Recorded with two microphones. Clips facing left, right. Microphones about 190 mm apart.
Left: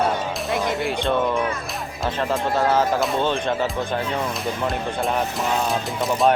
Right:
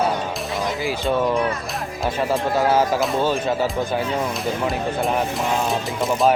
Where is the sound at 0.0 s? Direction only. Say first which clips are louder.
Even; centre (ahead or behind).